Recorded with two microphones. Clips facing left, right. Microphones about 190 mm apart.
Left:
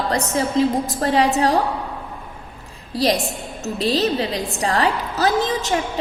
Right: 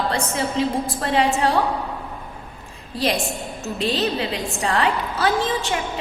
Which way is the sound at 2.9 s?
35° left (ahead or behind).